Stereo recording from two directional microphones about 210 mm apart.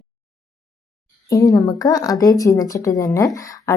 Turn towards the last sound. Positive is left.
turn(degrees=15)  # may be behind; listen again after turning